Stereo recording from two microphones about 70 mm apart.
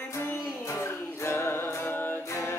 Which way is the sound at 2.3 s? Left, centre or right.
Left.